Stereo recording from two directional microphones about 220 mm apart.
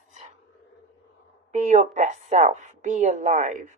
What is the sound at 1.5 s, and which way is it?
A woman's voice, 35° right (ahead or behind).